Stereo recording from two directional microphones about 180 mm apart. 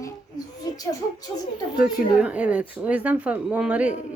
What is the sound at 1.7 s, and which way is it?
Speech, 5° right (ahead or behind).